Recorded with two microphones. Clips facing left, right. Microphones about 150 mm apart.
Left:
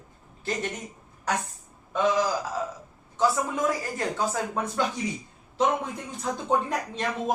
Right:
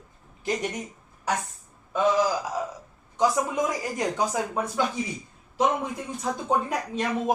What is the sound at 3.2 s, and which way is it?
Speech, 15° right (ahead or behind).